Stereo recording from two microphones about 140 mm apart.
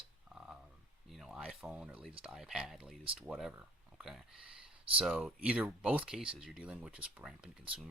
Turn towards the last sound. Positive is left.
turn(degrees=-5)  # may be behind; listen again after turning